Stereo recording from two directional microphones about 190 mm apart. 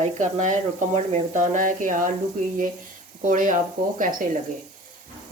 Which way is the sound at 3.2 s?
45° right (ahead or behind).